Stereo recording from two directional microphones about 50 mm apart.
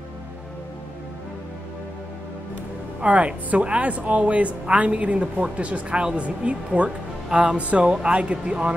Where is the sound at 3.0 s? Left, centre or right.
Right.